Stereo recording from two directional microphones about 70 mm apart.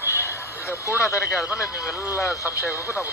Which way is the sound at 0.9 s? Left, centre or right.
Left.